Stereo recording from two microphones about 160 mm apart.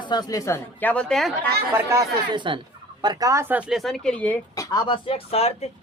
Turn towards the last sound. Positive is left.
turn(degrees=40)  # may be behind; listen again after turning